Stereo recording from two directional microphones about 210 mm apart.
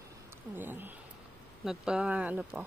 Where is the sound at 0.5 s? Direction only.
10° right (ahead or behind).